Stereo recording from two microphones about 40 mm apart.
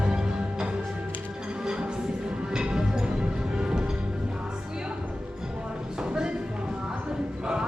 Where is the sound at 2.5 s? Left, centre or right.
Centre.